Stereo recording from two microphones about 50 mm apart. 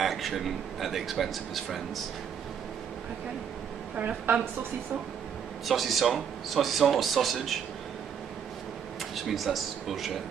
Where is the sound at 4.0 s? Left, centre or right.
Right.